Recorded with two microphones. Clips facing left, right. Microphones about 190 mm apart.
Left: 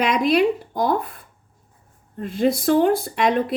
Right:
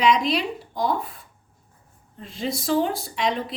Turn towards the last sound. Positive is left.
turn(degrees=55)  # may be behind; listen again after turning